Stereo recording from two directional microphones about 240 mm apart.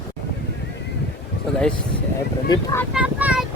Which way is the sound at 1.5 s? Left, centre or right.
Centre.